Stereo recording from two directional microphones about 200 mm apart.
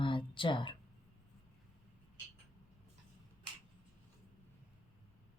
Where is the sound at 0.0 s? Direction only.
25° left (ahead or behind).